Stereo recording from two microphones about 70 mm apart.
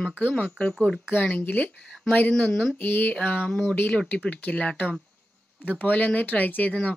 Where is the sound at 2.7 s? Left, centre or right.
Left.